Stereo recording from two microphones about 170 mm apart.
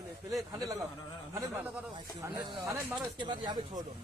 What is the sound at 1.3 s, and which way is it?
Speech, 10° right (ahead or behind).